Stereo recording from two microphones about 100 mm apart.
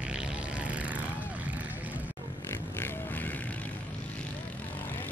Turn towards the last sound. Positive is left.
turn(degrees=20)  # may be behind; listen again after turning